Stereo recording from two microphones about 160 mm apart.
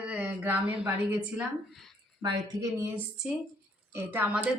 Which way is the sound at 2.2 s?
25° right (ahead or behind).